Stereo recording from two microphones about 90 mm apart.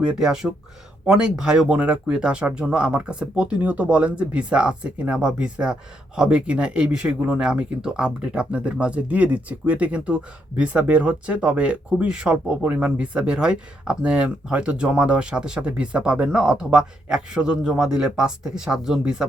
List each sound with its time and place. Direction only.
0.2 s speech: 5° right (ahead or behind)